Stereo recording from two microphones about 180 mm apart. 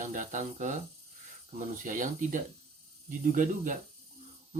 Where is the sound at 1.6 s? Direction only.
45° right (ahead or behind).